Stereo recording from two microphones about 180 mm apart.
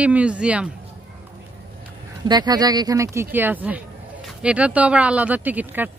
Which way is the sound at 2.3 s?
20° right (ahead or behind).